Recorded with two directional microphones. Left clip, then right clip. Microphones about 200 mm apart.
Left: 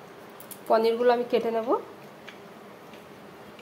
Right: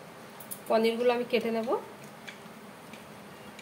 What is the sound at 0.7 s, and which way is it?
A woman's voice, 30° left (ahead or behind).